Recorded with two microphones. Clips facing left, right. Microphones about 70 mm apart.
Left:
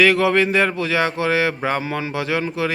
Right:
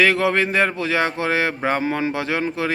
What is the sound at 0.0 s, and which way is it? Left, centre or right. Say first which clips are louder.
Speech: left 2 dB; right.